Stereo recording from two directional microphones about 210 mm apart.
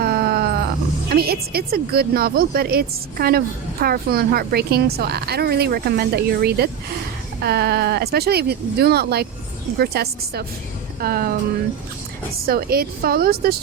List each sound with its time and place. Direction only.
0.0 s groan: 45° right (ahead or behind)
1.1 s speech: 45° right (ahead or behind)
12.5 s speech: 45° right (ahead or behind)